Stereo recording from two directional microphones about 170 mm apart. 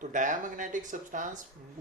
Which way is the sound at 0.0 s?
50° right (ahead or behind).